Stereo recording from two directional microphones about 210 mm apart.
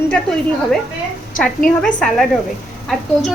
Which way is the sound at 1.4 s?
40° left (ahead or behind).